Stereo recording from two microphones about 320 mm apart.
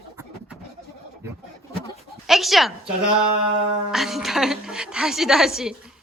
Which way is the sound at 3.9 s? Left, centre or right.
Centre.